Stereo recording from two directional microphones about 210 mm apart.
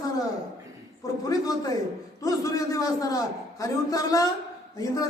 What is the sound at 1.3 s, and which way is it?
Speech, 15° left (ahead or behind).